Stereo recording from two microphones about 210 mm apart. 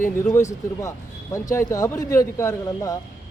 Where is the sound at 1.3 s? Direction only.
15° left (ahead or behind).